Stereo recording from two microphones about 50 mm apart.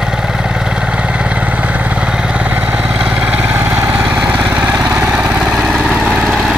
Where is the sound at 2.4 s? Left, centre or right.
Right.